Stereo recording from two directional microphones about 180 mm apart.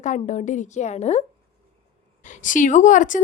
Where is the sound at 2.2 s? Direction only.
45° left (ahead or behind).